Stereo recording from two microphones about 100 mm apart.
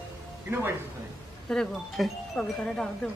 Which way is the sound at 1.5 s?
5° left (ahead or behind).